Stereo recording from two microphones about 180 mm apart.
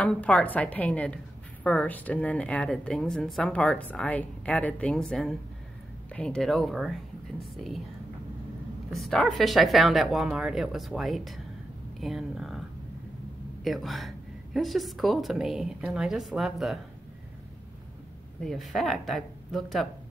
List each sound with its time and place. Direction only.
0.0 s a woman's voice: 5° left (ahead or behind)
8.9 s a woman's voice: centre (ahead or behind)
13.7 s a woman's voice: centre (ahead or behind)
18.4 s a woman's voice: centre (ahead or behind)